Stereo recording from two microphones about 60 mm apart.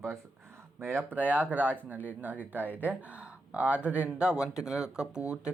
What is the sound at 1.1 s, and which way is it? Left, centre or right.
Speech, right.